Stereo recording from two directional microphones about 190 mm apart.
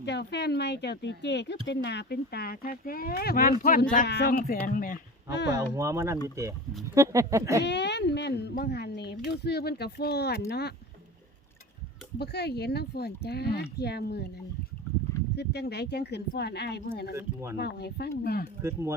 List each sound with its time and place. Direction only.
0.0 s speech: 60° left (ahead or behind)
5.3 s speech: 65° left (ahead or behind)
5.7 s speech: 15° right (ahead or behind)
7.6 s speech: 65° left (ahead or behind)
12.2 s speech: 60° left (ahead or behind)
15.4 s speech: 60° left (ahead or behind)
17.2 s speech: 15° right (ahead or behind)
17.6 s speech: 60° left (ahead or behind)
18.6 s speech: 15° right (ahead or behind)